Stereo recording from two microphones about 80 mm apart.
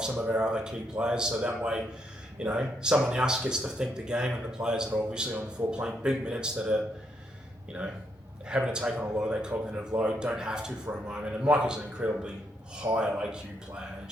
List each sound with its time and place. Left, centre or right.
0.1 s speech: right
0.3 s speech: centre